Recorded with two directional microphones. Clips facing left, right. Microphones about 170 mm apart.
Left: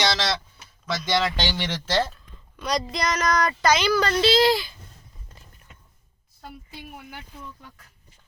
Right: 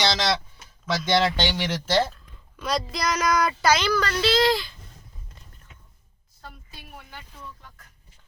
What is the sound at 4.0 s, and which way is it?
Speech, 30° left (ahead or behind).